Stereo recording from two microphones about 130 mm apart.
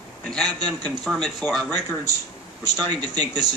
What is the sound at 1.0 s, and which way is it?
Speech, centre (ahead or behind).